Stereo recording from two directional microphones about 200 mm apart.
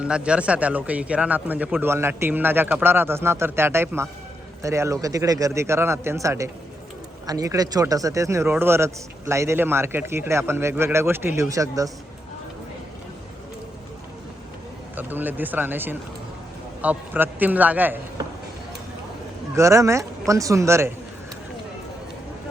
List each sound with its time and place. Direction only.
0.0 s speech: 5° right (ahead or behind)
14.9 s speech: 10° right (ahead or behind)
19.5 s speech: 15° right (ahead or behind)